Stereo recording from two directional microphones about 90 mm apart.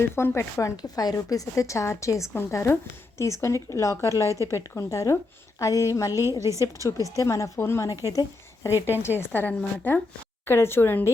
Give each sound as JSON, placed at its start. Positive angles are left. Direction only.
{"t": 0.2, "sound": "speech", "side_deg": 30}
{"t": 0.8, "sound": "a woman's voice", "side_deg": 45}
{"t": 6.4, "sound": "a woman's voice", "side_deg": -35}
{"t": 7.2, "sound": "a woman's voice", "side_deg": 35}